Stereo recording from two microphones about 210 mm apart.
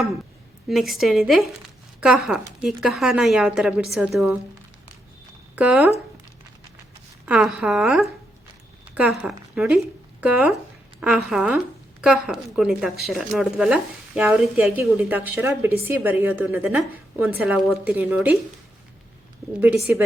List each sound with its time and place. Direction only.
0.7 s a woman's voice: centre (ahead or behind)
5.5 s speech: 5° right (ahead or behind)
7.3 s a woman's voice: 5° right (ahead or behind)
19.6 s speech: 10° right (ahead or behind)